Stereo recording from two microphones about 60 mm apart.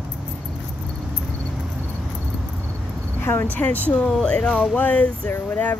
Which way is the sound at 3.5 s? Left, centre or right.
Left.